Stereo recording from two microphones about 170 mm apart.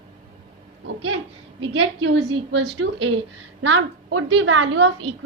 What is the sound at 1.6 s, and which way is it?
A woman's voice, 90° right.